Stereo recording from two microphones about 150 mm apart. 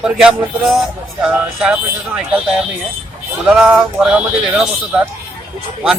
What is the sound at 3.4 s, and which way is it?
Speech, 5° right (ahead or behind).